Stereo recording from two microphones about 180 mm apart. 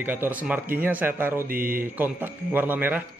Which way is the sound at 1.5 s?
50° right (ahead or behind).